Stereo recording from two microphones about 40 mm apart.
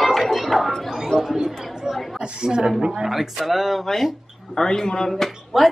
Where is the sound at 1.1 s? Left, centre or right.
Left.